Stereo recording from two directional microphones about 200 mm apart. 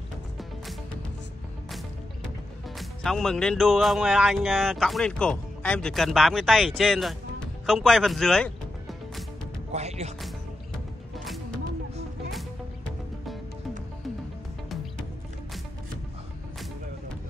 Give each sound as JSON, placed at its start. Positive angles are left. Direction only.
{"t": 2.8, "sound": "speech", "side_deg": 0}
{"t": 7.6, "sound": "music", "side_deg": 0}
{"t": 9.7, "sound": "speech", "side_deg": -35}
{"t": 12.3, "sound": "music", "side_deg": 0}